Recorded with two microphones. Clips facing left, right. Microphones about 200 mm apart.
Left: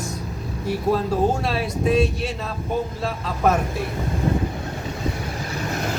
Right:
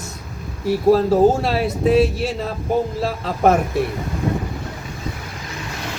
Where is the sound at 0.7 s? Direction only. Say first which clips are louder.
Right 7 dB; 30° right (ahead or behind).